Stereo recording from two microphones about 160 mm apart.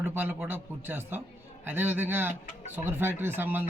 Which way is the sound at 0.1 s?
10° right (ahead or behind).